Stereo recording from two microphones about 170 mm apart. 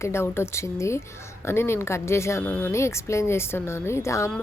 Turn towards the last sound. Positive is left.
turn(degrees=15)  # may be behind; listen again after turning